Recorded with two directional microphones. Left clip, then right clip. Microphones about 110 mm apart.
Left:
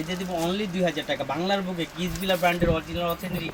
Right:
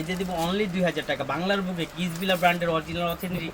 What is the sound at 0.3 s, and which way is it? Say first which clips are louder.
Speech: even; 10° right (ahead or behind).